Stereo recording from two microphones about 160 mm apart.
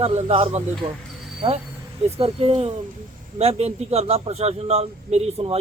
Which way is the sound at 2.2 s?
40° right (ahead or behind).